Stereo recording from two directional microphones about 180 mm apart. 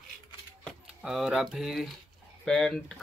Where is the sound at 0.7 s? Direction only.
Centre (ahead or behind).